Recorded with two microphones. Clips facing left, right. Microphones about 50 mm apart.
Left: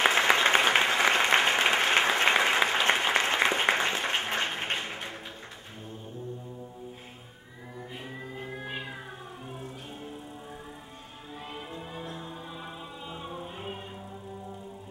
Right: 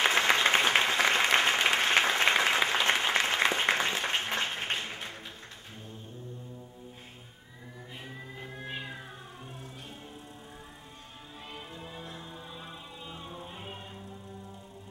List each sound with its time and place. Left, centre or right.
0.0 s applause: centre
4.7 s music: centre
8.4 s cat: centre
11.5 s music: centre